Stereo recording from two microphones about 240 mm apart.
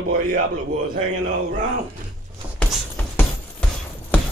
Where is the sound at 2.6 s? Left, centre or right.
Centre.